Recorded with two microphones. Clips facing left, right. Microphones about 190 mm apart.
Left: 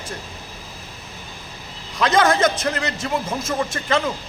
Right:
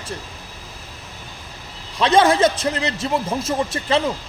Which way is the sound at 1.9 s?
30° right (ahead or behind).